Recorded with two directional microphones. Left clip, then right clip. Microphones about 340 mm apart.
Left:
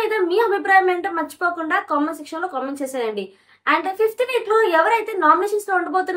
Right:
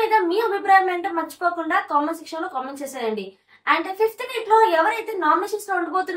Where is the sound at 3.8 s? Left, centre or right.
Centre.